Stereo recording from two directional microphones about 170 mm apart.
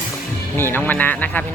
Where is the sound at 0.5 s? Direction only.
10° left (ahead or behind).